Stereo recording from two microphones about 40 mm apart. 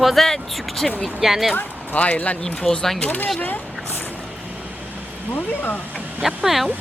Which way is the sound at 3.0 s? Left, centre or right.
Left.